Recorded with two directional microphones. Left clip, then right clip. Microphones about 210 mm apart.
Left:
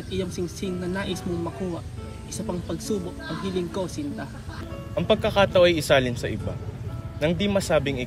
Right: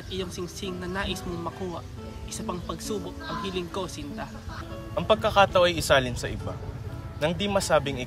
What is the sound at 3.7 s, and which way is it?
Speech, 30° right (ahead or behind).